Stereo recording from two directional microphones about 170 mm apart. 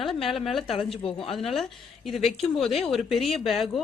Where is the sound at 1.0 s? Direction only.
30° left (ahead or behind).